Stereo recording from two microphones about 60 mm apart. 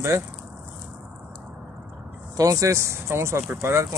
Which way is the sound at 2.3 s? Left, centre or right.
Right.